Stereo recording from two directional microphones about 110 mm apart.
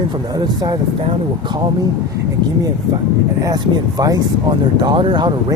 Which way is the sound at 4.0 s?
40° right (ahead or behind).